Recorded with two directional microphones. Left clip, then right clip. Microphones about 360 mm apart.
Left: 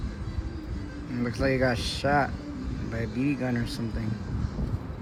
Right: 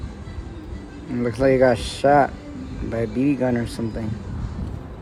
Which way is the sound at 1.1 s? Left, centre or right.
Right.